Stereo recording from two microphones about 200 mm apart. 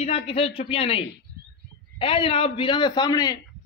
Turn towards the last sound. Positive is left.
turn(degrees=20)  # may be behind; listen again after turning